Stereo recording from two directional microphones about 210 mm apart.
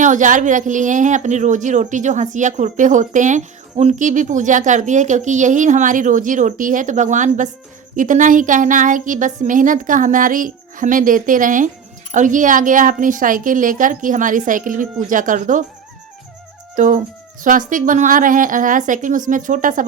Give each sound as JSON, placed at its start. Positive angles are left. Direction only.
{"t": 0.0, "sound": "speech", "side_deg": -35}
{"t": 16.7, "sound": "speech", "side_deg": -40}